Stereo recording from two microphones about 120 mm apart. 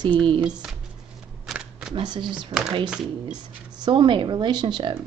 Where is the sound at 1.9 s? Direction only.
40° right (ahead or behind).